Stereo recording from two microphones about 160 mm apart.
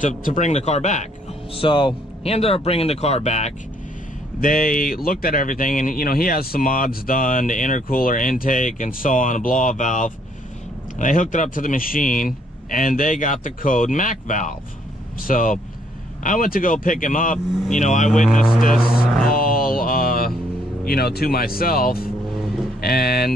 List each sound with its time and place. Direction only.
0.0 s speech: 50° left (ahead or behind)
1.5 s speech: 35° left (ahead or behind)
4.4 s speech: 60° left (ahead or behind)
18.2 s speech: 5° left (ahead or behind)
18.8 s speech: 5° right (ahead or behind)
19.3 s mantra: 65° left (ahead or behind)
20.8 s speech: 80° left